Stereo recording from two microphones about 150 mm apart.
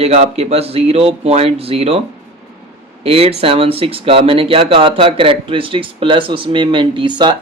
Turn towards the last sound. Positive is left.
turn(degrees=-30)  # may be behind; listen again after turning